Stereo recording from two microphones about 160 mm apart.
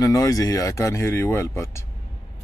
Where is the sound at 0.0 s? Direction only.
20° left (ahead or behind).